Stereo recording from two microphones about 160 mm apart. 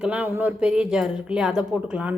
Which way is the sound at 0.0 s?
10° right (ahead or behind).